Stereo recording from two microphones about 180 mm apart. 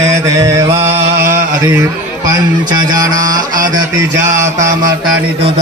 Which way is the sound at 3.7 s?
20° right (ahead or behind).